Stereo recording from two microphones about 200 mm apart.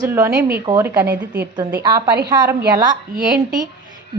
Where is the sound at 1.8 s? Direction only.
20° right (ahead or behind).